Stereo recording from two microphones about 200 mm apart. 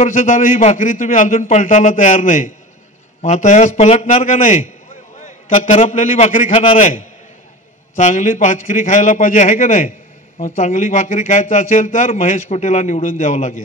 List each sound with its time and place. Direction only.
0.0 s a man's voice: 40° left (ahead or behind)